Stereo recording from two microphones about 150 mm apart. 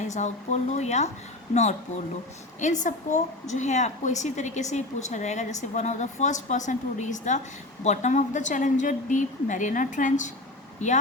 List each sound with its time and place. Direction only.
0.1 s a woman's voice: 50° left (ahead or behind)
2.6 s a woman's voice: 55° left (ahead or behind)